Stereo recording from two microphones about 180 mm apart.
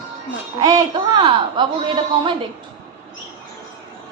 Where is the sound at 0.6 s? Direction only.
20° right (ahead or behind).